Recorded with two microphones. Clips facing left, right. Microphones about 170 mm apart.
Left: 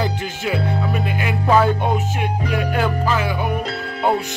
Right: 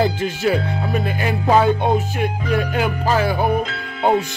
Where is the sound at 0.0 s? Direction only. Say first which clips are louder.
Right 5 dB; 35° right (ahead or behind).